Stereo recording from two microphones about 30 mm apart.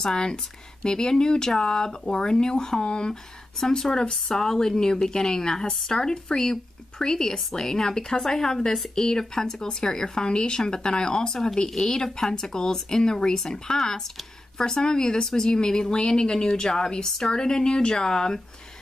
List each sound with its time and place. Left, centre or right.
0.0 s a woman's voice: left
3.1 s a woman's voice: centre